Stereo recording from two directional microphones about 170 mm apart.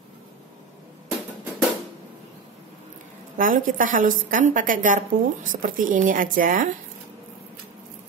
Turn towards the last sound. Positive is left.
turn(degrees=-55)  # may be behind; listen again after turning